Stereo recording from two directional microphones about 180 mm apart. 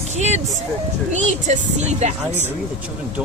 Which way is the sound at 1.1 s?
40° right (ahead or behind).